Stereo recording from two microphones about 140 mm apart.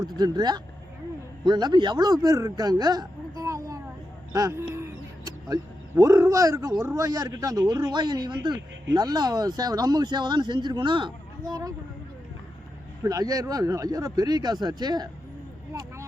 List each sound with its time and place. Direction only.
0.2 s speech: 30° right (ahead or behind)
4.3 s a sound: 20° right (ahead or behind)
6.0 s speech: 20° right (ahead or behind)
13.0 s speech: 25° right (ahead or behind)